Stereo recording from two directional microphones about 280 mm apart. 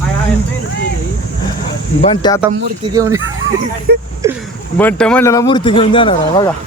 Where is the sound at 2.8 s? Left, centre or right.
Centre.